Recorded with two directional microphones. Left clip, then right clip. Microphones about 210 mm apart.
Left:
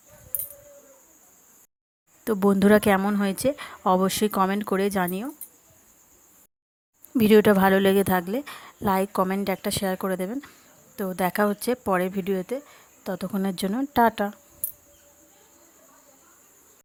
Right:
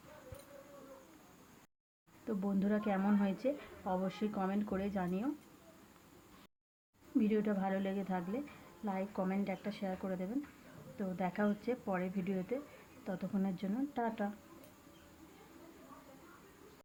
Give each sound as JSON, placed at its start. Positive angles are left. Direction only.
{"t": 2.2, "sound": "a woman's voice", "side_deg": 55}
{"t": 7.2, "sound": "a woman's voice", "side_deg": 55}